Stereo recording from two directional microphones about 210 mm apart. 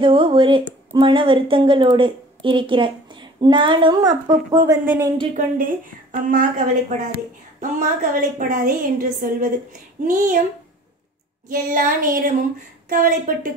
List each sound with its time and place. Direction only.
0.0 s a woman's voice: 25° right (ahead or behind)
5.3 s a woman's voice: 40° right (ahead or behind)
11.4 s a woman's voice: 40° right (ahead or behind)